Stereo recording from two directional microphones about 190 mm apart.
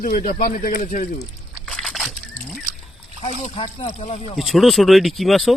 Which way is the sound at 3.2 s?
35° left (ahead or behind).